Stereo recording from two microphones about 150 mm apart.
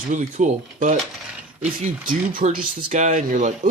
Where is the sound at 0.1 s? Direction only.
60° right (ahead or behind).